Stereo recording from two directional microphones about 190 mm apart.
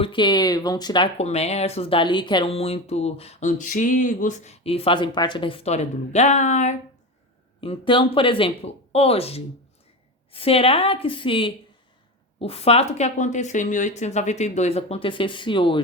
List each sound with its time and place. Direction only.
0.0 s speech: 25° left (ahead or behind)
7.6 s speech: 30° left (ahead or behind)